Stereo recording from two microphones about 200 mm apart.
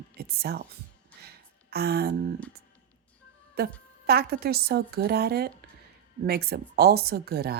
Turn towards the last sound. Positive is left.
turn(degrees=-50)  # may be behind; listen again after turning